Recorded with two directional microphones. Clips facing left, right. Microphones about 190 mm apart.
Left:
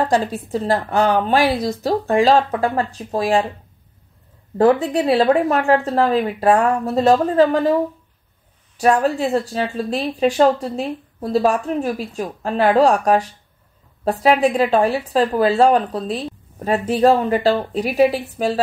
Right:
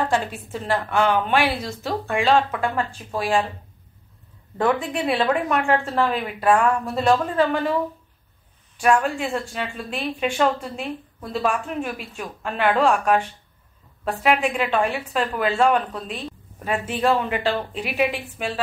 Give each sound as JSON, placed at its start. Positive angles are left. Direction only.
{"t": 0.0, "sound": "speech", "side_deg": 35}
{"t": 4.6, "sound": "speech", "side_deg": 35}
{"t": 8.7, "sound": "speech", "side_deg": 35}